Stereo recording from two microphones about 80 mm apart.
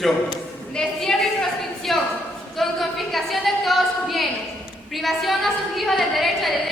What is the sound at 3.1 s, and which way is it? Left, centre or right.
A woman's voice, centre.